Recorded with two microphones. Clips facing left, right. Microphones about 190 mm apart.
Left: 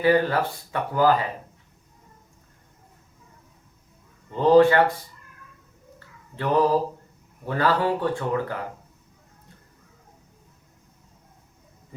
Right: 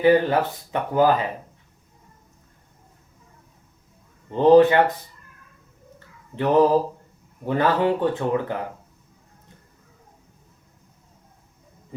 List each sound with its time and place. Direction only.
0.0 s speech: 20° right (ahead or behind)
4.3 s speech: 20° right (ahead or behind)
6.3 s speech: 20° right (ahead or behind)